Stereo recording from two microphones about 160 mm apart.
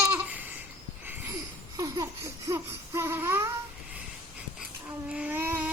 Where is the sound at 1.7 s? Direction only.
20° right (ahead or behind).